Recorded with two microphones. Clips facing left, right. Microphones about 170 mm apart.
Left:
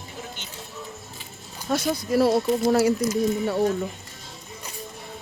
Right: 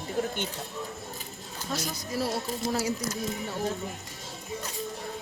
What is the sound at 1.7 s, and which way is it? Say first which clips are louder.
Speech: left 10 dB; 60° left (ahead or behind).